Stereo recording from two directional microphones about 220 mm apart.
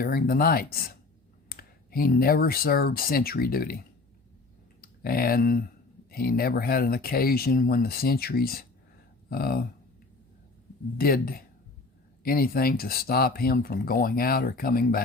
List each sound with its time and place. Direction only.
0.0 s speech: 40° left (ahead or behind)
10.9 s speech: 40° left (ahead or behind)